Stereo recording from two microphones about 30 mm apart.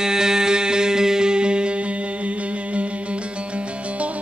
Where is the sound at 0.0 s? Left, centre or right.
Right.